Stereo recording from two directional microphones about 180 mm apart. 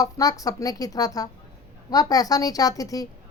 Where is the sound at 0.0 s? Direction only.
20° left (ahead or behind).